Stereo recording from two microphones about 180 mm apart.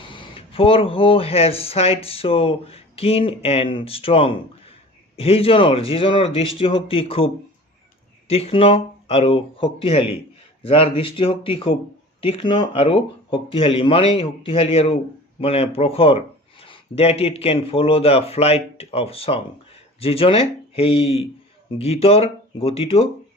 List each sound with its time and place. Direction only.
0.0 s speech: 30° left (ahead or behind)
8.3 s speech: 30° left (ahead or behind)